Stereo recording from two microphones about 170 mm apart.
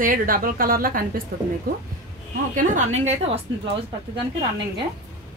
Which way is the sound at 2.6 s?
45° right (ahead or behind).